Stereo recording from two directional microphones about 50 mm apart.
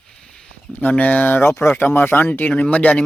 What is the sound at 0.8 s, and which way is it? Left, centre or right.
Speech, left.